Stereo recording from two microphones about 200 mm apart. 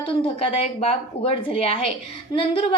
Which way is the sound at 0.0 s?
30° left (ahead or behind).